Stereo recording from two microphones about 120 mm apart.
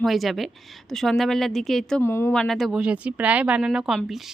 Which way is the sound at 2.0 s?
20° left (ahead or behind).